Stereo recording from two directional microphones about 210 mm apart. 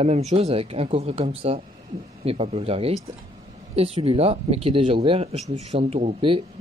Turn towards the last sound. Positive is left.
turn(degrees=-25)  # may be behind; listen again after turning